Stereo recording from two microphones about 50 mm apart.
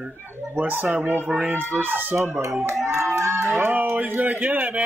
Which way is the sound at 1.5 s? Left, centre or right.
Right.